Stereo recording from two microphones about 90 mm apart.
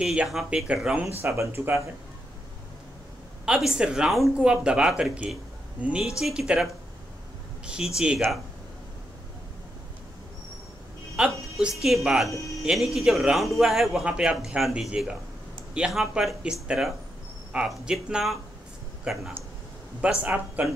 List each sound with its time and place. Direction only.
0.0 s speech: 10° right (ahead or behind)
1.0 s speech: 30° right (ahead or behind)
3.4 s speech: 10° right (ahead or behind)
11.1 s music: 5° right (ahead or behind)
11.8 s speech: centre (ahead or behind)
12.3 s speech: 35° left (ahead or behind)
12.6 s speech: centre (ahead or behind); by 20.6 s 15° right (ahead or behind)